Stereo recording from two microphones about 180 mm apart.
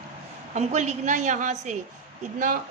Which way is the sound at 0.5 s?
40° right (ahead or behind).